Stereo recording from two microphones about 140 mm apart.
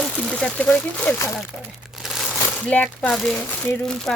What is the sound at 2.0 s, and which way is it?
Crumpling, centre (ahead or behind).